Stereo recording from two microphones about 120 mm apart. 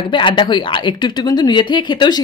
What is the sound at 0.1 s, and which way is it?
Speech, 40° left (ahead or behind).